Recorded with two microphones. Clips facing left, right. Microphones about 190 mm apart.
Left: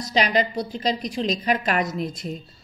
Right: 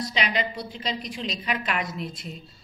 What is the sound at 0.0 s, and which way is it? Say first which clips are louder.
A woman's voice: left 6 dB; 40° left (ahead or behind).